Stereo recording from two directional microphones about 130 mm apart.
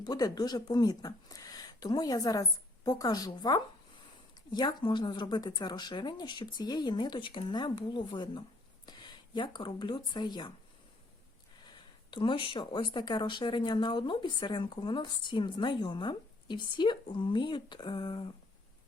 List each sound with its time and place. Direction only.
0.0 s speech: 30° left (ahead or behind)
11.6 s speech: 35° left (ahead or behind)